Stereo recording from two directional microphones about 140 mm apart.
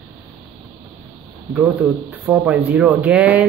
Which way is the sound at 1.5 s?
10° right (ahead or behind).